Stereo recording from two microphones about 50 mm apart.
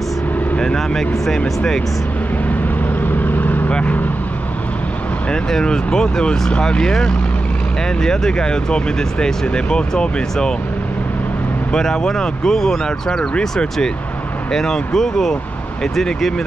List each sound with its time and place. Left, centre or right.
0.6 s speech: centre
3.0 s vehicle: left
5.3 s speech: centre
11.7 s speech: centre